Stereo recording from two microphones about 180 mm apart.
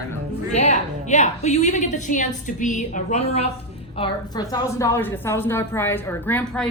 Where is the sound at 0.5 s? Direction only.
40° left (ahead or behind).